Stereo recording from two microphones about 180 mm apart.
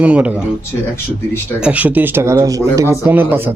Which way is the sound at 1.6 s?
10° right (ahead or behind).